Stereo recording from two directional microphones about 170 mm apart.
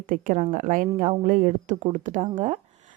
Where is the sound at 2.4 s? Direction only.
50° right (ahead or behind).